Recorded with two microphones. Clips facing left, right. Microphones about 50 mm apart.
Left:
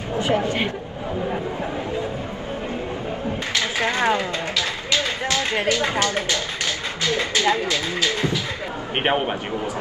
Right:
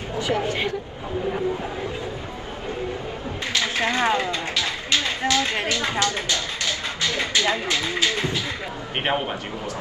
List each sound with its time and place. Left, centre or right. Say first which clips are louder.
0.2 s a woman's voice: left 2 dB; left
3.5 s a sound: even; left
4.6 s a sound: left 1 dB; right
5.2 s speech: even; left
5.8 s music: left 2 dB; left
7.3 s speech: left 2 dB; left
8.9 s a man's voice: left 3 dB; centre